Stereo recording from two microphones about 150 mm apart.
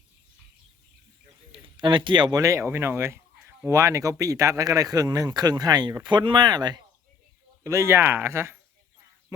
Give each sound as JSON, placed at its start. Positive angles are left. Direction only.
{"t": 1.5, "sound": "speech", "side_deg": -35}